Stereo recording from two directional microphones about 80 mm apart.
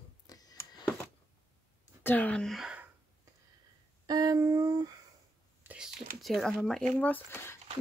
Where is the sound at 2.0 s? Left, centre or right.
Centre.